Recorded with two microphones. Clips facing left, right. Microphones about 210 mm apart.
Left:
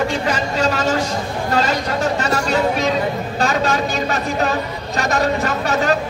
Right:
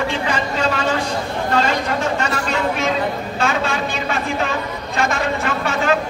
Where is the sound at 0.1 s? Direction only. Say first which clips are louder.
Left 1 dB; 40° left (ahead or behind).